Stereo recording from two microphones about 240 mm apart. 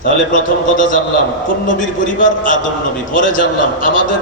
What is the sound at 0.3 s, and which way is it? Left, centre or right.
Speech, left.